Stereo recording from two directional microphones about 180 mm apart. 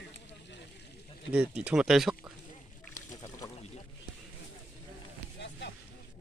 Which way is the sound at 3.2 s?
20° left (ahead or behind).